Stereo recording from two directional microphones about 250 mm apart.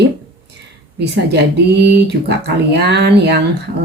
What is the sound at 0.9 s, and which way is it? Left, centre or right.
Speech, right.